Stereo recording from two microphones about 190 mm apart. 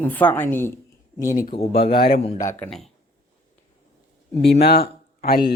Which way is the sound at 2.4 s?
10° left (ahead or behind).